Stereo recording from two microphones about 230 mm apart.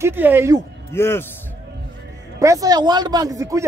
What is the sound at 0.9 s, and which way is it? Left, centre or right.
Speech, centre.